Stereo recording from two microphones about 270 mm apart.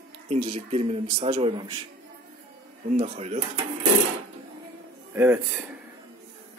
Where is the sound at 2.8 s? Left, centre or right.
Right.